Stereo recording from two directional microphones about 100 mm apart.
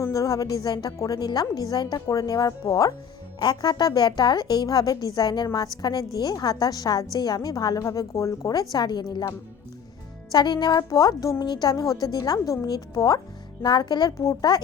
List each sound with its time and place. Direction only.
0.0 s a woman's voice: 35° left (ahead or behind)
10.3 s a woman's voice: 45° left (ahead or behind)